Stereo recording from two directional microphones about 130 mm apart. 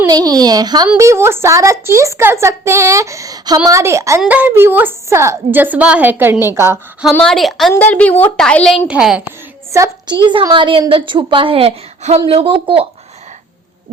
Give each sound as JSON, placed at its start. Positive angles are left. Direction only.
{"t": 0.1, "sound": "a woman's voice", "side_deg": -30}
{"t": 7.1, "sound": "a woman's voice", "side_deg": 5}
{"t": 7.7, "sound": "a woman's voice", "side_deg": 15}
{"t": 8.9, "sound": "a woman's voice", "side_deg": -5}
{"t": 10.1, "sound": "a woman's voice", "side_deg": -40}